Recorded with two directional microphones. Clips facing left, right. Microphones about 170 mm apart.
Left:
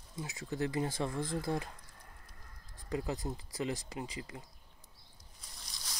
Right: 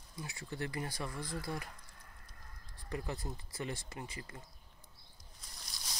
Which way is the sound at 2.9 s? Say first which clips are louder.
Left 4 dB; 20° left (ahead or behind).